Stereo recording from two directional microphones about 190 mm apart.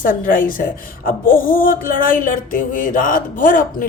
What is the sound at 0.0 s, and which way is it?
A woman's voice, 45° left (ahead or behind).